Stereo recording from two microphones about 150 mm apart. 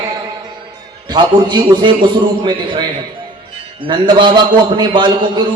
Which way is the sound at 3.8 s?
30° right (ahead or behind).